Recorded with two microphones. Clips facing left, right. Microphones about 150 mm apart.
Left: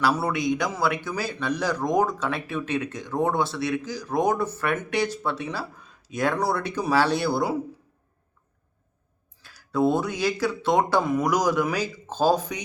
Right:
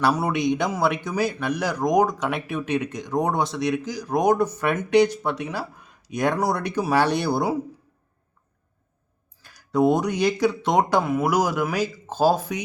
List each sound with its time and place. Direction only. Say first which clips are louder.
0.0 s a man's voice: right 2 dB; 20° right (ahead or behind)
9.4 s speech: right 3 dB; 15° right (ahead or behind)
11.0 s speech: right 1 dB; 5° right (ahead or behind)